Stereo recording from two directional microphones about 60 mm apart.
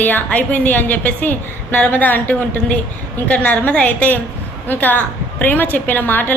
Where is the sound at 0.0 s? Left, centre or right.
Left.